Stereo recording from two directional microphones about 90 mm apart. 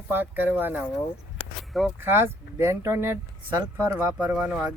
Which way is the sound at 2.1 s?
25° right (ahead or behind).